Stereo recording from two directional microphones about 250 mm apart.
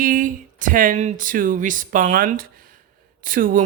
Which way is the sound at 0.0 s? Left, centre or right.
Right.